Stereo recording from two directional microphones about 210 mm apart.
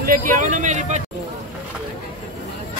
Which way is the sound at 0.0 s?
40° right (ahead or behind).